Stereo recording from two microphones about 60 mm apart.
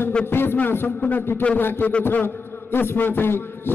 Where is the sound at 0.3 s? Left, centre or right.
Left.